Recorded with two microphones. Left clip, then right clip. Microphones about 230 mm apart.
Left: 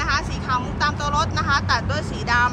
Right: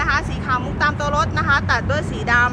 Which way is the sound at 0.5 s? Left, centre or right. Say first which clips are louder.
Right 3 dB; centre.